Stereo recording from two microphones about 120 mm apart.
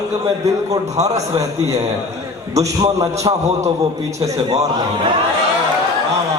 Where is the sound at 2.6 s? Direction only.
30° right (ahead or behind).